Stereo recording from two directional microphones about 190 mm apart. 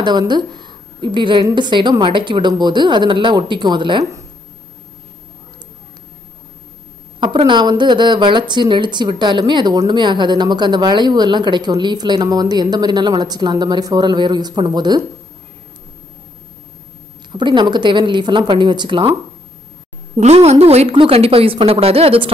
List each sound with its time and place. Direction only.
0.0 s speech: 20° right (ahead or behind)
7.2 s speech: 25° right (ahead or behind)
17.3 s speech: 25° right (ahead or behind)
20.2 s a woman's voice: 35° right (ahead or behind)